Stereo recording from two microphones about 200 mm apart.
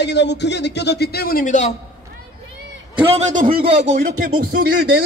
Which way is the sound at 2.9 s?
30° right (ahead or behind).